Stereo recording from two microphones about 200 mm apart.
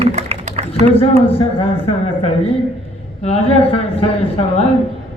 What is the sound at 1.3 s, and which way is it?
Speech, 30° left (ahead or behind).